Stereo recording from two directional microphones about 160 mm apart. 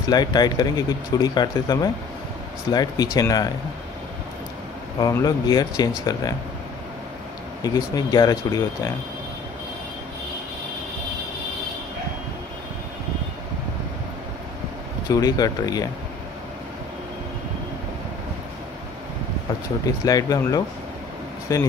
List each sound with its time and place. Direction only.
0.1 s speech: 25° left (ahead or behind)
5.0 s speech: 25° left (ahead or behind)
7.6 s speech: 25° left (ahead or behind)
15.0 s speech: 20° left (ahead or behind)
20.1 s speech: 25° left (ahead or behind)